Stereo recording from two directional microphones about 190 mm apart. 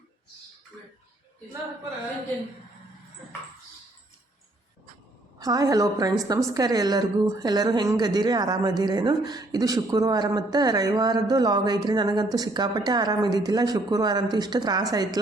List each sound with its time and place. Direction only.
5.4 s a woman's voice: 20° right (ahead or behind)